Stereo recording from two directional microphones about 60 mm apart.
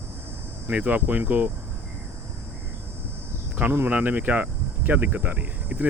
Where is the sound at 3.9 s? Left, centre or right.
Right.